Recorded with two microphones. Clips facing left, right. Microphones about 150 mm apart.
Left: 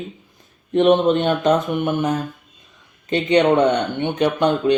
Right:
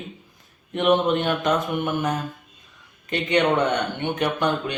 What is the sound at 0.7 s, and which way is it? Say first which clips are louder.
Speech: left 5 dB; 30° left (ahead or behind).